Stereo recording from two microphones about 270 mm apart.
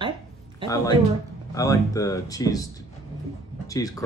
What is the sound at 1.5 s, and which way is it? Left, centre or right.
Speech, centre.